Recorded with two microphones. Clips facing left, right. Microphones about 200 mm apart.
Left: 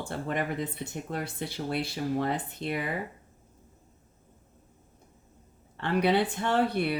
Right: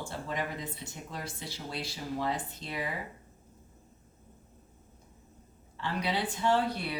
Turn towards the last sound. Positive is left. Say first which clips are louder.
# left 3 dB
turn(degrees=60)  # may be behind; listen again after turning